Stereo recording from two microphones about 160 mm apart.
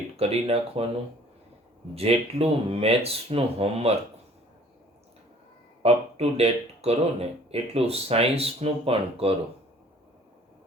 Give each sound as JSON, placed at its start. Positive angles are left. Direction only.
{"t": 0.2, "sound": "speech", "side_deg": -40}
{"t": 2.0, "sound": "speech", "side_deg": -40}
{"t": 5.8, "sound": "speech", "side_deg": -40}